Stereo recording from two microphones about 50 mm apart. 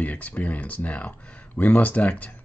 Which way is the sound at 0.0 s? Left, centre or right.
Left.